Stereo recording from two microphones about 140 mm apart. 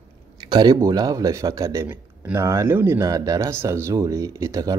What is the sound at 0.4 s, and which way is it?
Speech, 30° right (ahead or behind).